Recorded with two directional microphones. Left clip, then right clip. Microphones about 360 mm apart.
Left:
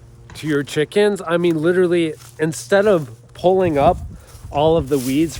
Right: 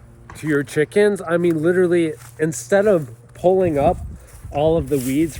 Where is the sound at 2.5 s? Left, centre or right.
Centre.